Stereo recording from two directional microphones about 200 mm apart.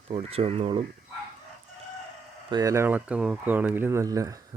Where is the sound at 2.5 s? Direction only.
15° right (ahead or behind).